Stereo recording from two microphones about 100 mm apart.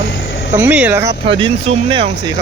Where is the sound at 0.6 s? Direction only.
15° right (ahead or behind).